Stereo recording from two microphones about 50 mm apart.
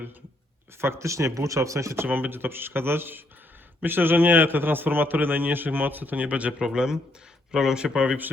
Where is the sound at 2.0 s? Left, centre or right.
Right.